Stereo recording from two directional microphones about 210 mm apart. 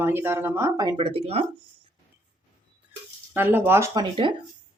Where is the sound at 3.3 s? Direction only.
10° right (ahead or behind).